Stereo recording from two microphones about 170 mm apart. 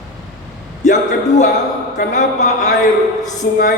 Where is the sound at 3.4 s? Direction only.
60° left (ahead or behind).